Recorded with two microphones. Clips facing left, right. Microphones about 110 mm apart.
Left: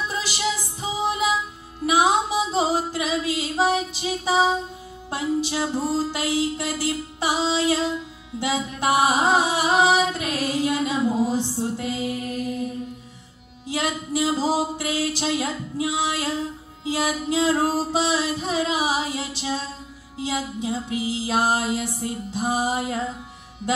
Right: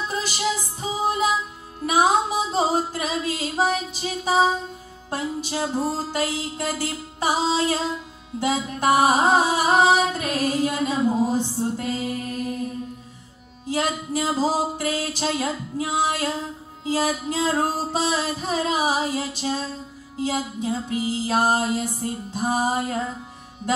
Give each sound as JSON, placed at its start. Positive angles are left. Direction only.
{"t": 0.1, "sound": "music", "side_deg": -40}
{"t": 1.9, "sound": "singing", "side_deg": -40}
{"t": 3.9, "sound": "music", "side_deg": -40}
{"t": 13.7, "sound": "music", "side_deg": -40}